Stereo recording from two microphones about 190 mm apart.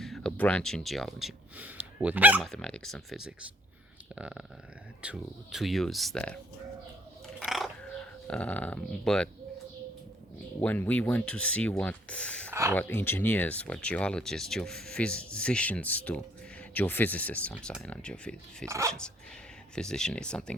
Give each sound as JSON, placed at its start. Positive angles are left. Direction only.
{"t": 0.0, "sound": "speech", "side_deg": 5}
{"t": 7.3, "sound": "a sound", "side_deg": 0}
{"t": 10.6, "sound": "speech", "side_deg": 10}
{"t": 12.5, "sound": "a sound", "side_deg": -15}
{"t": 12.7, "sound": "speech", "side_deg": 10}
{"t": 18.7, "sound": "speech", "side_deg": -15}
{"t": 19.7, "sound": "speech", "side_deg": 5}